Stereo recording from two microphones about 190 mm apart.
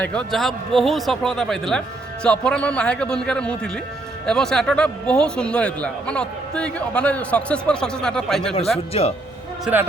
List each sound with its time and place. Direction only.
0.0 s a man's voice: 5° left (ahead or behind)
8.9 s speech: 30° left (ahead or behind)
9.7 s a man's voice: 5° right (ahead or behind)